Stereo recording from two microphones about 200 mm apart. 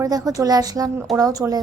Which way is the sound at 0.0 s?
20° right (ahead or behind).